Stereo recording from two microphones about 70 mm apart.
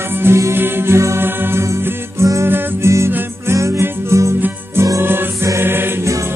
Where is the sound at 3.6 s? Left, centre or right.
Right.